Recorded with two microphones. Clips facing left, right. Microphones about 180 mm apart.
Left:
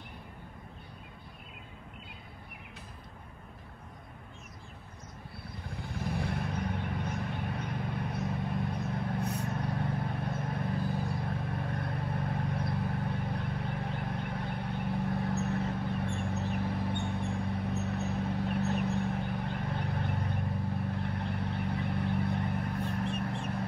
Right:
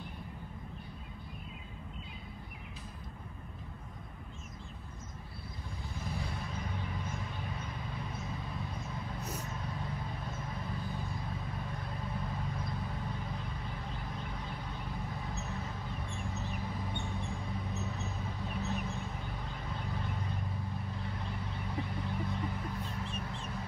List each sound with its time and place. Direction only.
5.9 s vehicle: 60° left (ahead or behind)